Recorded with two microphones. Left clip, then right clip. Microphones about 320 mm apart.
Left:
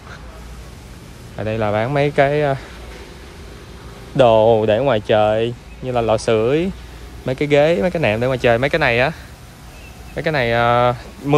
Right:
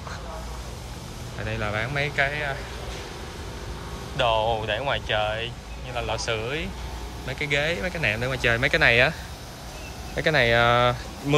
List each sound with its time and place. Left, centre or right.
1.4 s speech: centre
4.3 s speech: left
4.6 s speech: centre
10.1 s speech: centre